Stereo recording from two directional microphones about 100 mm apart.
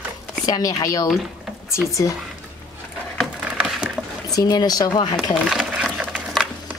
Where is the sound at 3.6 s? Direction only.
5° right (ahead or behind).